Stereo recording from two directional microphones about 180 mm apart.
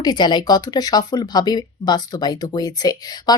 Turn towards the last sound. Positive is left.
turn(degrees=20)  # may be behind; listen again after turning